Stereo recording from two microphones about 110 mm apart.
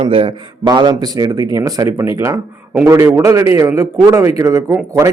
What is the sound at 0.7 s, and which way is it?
A man's voice, 40° right (ahead or behind).